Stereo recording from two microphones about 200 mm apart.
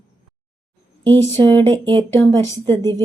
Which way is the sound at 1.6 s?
25° right (ahead or behind).